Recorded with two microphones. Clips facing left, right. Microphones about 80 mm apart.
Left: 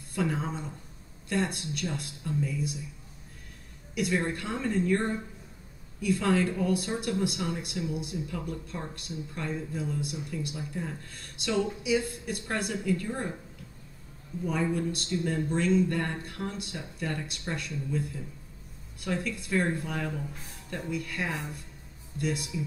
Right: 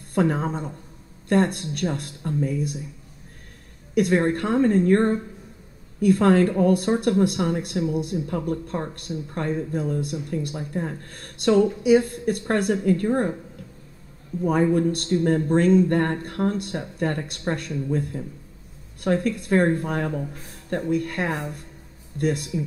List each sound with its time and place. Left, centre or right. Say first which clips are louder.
0.1 s a woman's voice: right 8 dB; right
3.9 s a woman's voice: right 9 dB; right
14.4 s a woman's voice: right 9 dB; right